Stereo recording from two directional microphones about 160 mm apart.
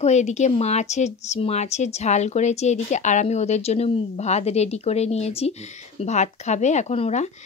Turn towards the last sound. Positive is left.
turn(degrees=40)  # may be behind; listen again after turning